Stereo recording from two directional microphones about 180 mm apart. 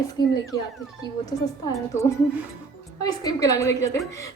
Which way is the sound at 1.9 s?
15° left (ahead or behind).